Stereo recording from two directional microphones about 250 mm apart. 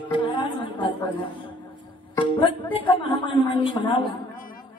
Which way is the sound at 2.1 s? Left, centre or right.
Centre.